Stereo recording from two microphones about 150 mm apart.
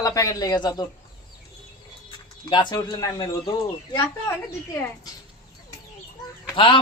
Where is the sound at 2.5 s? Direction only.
30° left (ahead or behind).